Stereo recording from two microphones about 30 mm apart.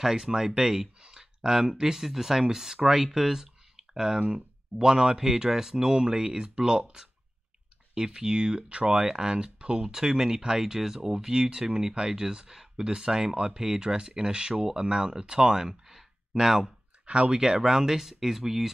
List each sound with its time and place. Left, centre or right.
0.0 s speech: centre
7.9 s speech: right
9.8 s speech: centre
17.0 s speech: right
17.3 s speech: right